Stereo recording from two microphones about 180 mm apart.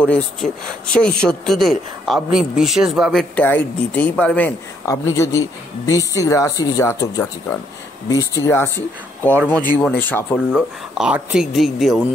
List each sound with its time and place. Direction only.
0.1 s speech: 5° left (ahead or behind)
10.5 s speech: 5° right (ahead or behind)